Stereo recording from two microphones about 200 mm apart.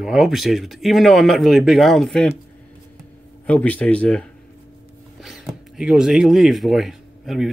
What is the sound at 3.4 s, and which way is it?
Speech, 5° left (ahead or behind).